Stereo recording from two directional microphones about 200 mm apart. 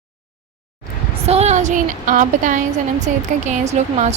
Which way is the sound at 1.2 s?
30° right (ahead or behind).